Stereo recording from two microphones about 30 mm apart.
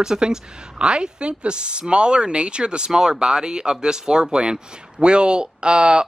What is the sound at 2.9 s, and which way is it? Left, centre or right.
Speech, centre.